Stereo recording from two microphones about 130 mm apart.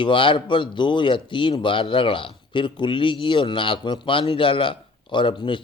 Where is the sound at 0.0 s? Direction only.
40° left (ahead or behind).